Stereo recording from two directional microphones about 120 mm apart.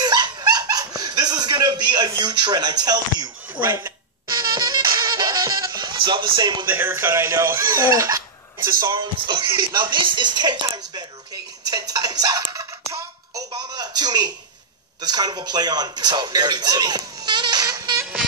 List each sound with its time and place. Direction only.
0.0 s dog: 35° right (ahead or behind)
2.1 s speech: 40° right (ahead or behind)
3.5 s speech: 20° right (ahead or behind)
4.3 s music: 35° right (ahead or behind)
6.7 s speech: 15° right (ahead or behind)
8.8 s speech: 35° right (ahead or behind)
13.5 s a sound: 35° right (ahead or behind)
15.0 s speech: 35° right (ahead or behind)